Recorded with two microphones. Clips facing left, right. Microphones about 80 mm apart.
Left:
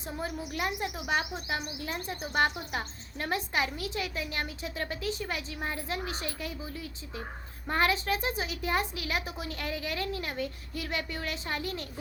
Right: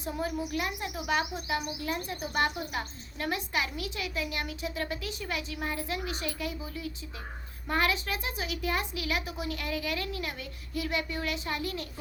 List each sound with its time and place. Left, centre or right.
0.0 s speech: left